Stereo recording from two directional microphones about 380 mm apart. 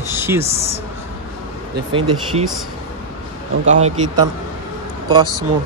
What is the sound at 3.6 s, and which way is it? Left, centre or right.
Speech, centre.